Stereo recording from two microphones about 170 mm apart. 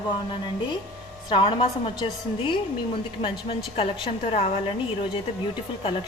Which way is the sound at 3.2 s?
30° left (ahead or behind).